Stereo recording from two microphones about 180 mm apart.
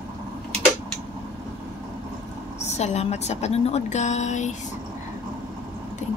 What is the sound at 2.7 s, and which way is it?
A woman's voice, 40° left (ahead or behind).